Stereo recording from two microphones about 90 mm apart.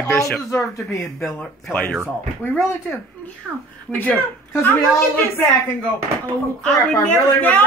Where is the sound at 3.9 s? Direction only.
20° left (ahead or behind).